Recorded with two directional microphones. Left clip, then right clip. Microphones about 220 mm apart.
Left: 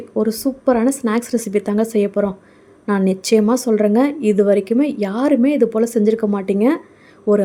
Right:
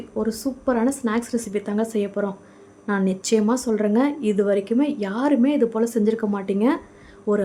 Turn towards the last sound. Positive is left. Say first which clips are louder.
# left 7 dB
turn(degrees=20)  # may be behind; listen again after turning